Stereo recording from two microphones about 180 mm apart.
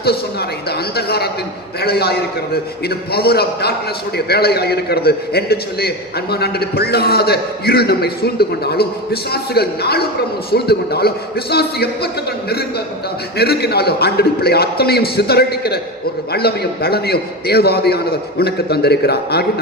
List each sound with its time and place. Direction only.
0.0 s a man's voice: 60° left (ahead or behind)
13.3 s a man's voice: 60° left (ahead or behind)